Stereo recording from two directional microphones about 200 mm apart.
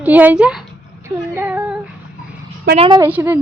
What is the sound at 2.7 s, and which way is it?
Speech, 30° right (ahead or behind).